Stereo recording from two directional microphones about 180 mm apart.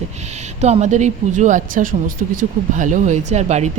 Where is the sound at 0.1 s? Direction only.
40° right (ahead or behind).